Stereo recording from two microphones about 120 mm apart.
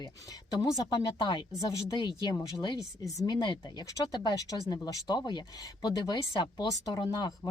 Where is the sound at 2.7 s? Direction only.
25° left (ahead or behind).